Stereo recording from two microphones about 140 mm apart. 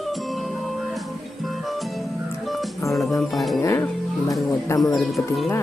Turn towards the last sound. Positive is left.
turn(degrees=0)  # may be behind; listen again after turning